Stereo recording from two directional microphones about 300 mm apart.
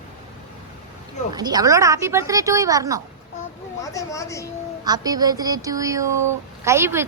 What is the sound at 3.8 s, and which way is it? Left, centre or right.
Speech, centre.